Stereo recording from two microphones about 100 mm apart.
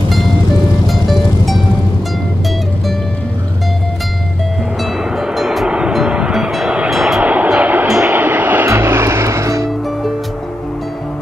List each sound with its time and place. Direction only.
5.1 s vehicle: 5° right (ahead or behind); by 9.7 s 30° right (ahead or behind)